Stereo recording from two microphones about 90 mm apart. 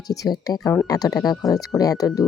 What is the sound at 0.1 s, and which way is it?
Speech, 45° left (ahead or behind).